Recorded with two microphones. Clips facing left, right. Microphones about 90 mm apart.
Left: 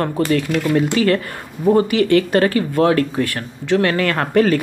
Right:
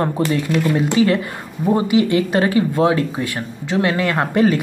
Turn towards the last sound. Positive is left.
turn(degrees=-15)  # may be behind; listen again after turning